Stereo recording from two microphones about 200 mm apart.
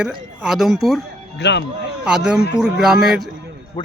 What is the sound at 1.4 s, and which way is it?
Speech, 60° left (ahead or behind).